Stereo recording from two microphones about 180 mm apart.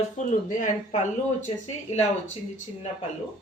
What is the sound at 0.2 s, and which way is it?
Speech, 45° left (ahead or behind).